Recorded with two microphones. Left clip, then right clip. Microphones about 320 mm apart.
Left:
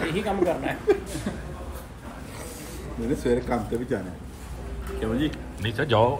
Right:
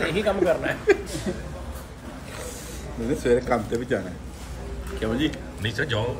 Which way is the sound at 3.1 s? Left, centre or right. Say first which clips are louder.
Right 4 dB; centre.